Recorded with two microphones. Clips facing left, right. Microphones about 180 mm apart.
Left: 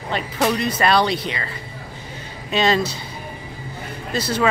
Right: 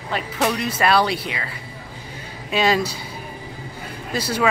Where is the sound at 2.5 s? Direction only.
10° right (ahead or behind).